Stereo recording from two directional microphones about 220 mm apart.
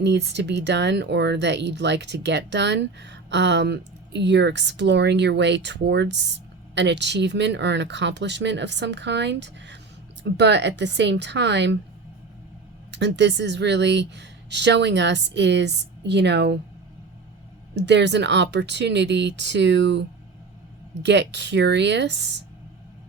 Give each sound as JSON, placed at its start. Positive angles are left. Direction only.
{"t": 0.0, "sound": "speech", "side_deg": -50}
{"t": 12.9, "sound": "speech", "side_deg": -50}
{"t": 17.7, "sound": "speech", "side_deg": -50}